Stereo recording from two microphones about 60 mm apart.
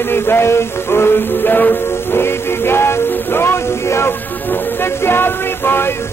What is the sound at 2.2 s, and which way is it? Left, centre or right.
Music, left.